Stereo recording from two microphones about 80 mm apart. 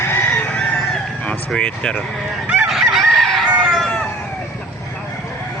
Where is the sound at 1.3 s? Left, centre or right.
Centre.